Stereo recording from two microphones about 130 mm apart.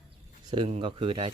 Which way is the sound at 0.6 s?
50° right (ahead or behind).